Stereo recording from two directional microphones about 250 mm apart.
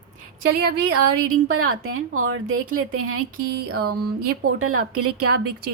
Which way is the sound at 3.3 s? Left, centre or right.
Right.